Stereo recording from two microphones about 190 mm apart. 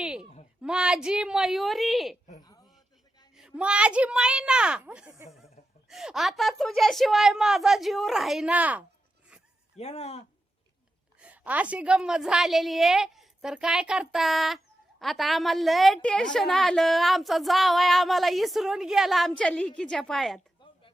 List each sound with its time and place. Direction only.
0.0 s a sound: 5° right (ahead or behind)
0.6 s a woman's voice: 5° right (ahead or behind)
3.3 s a woman's voice: 5° right (ahead or behind)
9.7 s speech: 35° left (ahead or behind)
11.2 s a woman's voice: 5° right (ahead or behind)
20.6 s a sound: 25° left (ahead or behind)